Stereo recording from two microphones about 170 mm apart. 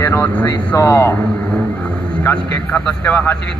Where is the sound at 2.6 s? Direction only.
10° left (ahead or behind).